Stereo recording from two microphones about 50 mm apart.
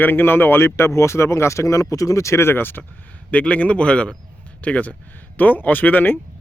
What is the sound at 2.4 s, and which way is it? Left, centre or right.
Speech, left.